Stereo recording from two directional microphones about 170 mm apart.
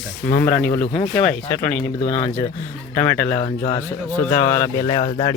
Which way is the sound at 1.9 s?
40° left (ahead or behind).